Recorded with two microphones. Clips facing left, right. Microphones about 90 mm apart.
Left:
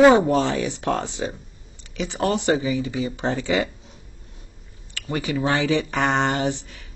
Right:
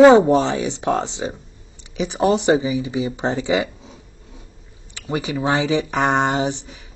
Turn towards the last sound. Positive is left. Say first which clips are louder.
# right 2 dB
turn(degrees=-20)  # may be behind; listen again after turning